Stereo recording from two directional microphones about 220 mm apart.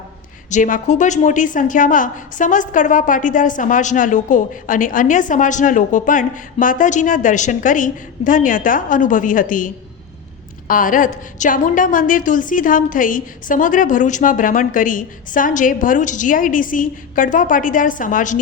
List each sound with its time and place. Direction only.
0.5 s a woman's voice: 35° left (ahead or behind)